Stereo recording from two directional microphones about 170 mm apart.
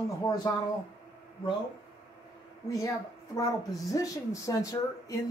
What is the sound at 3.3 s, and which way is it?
Speech, 20° left (ahead or behind).